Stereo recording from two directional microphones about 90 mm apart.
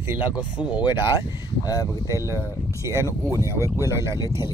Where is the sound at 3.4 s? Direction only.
30° right (ahead or behind).